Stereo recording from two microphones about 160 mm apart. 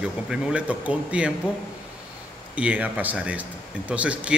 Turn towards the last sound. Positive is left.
turn(degrees=-10)  # may be behind; listen again after turning